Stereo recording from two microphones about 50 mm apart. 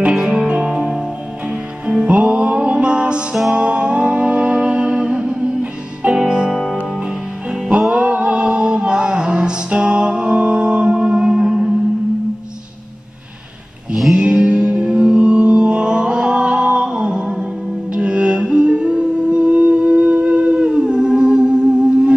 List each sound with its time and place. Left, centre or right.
0.5 s music: centre
7.9 s music: right
14.1 s music: right